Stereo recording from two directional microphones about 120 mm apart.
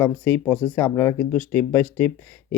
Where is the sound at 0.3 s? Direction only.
15° left (ahead or behind).